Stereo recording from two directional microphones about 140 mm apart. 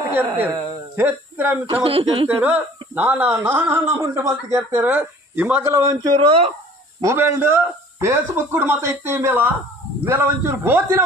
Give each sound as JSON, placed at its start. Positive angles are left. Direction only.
{"t": 0.0, "sound": "a woman's voice", "side_deg": -15}
{"t": 1.7, "sound": "a woman's voice", "side_deg": -40}
{"t": 2.2, "sound": "a man's voice", "side_deg": -20}
{"t": 4.7, "sound": "a man's voice", "side_deg": -10}
{"t": 6.1, "sound": "a woman's voice", "side_deg": -40}
{"t": 7.0, "sound": "a man's voice", "side_deg": -20}